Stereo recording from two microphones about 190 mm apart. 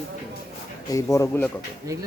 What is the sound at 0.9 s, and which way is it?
Speech, 15° left (ahead or behind).